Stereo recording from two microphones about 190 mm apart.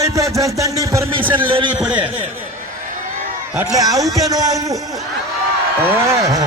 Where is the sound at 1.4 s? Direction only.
25° right (ahead or behind).